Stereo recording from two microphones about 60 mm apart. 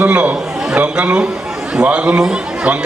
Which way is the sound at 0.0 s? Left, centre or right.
Right.